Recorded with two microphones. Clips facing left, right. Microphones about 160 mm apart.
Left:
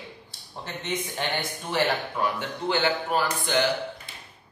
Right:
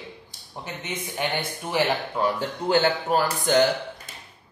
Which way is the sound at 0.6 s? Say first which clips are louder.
Left 2 dB; 10° right (ahead or behind).